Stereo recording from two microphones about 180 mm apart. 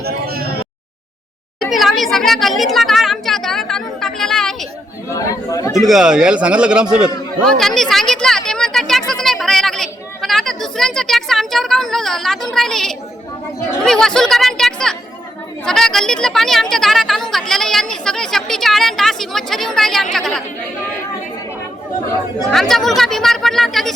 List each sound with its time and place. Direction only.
0.0 s a sound: 60° right (ahead or behind)
1.7 s a woman's voice: centre (ahead or behind)
5.1 s speech: 20° left (ahead or behind)
5.9 s a woman's voice: 5° right (ahead or behind)
7.4 s a sound: 5° left (ahead or behind)
13.7 s a woman's voice: centre (ahead or behind)
22.5 s a woman's voice: centre (ahead or behind)